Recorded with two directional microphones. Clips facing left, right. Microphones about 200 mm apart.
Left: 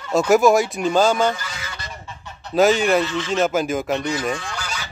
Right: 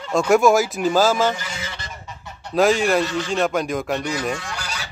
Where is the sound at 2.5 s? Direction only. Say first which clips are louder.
Left 1 dB; centre (ahead or behind).